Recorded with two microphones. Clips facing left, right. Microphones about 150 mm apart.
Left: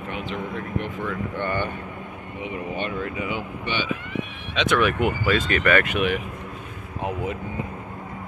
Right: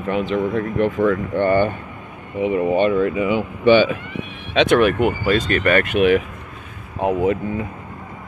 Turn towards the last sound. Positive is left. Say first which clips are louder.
# right 10 dB
turn(degrees=-60)  # may be behind; listen again after turning